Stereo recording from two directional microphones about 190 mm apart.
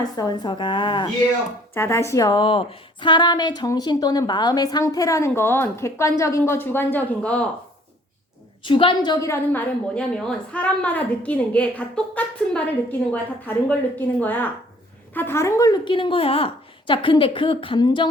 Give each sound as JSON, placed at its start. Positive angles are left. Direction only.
{"t": 0.0, "sound": "a woman's voice", "side_deg": 20}
{"t": 1.7, "sound": "a woman's voice", "side_deg": 15}
{"t": 8.6, "sound": "a woman's voice", "side_deg": 25}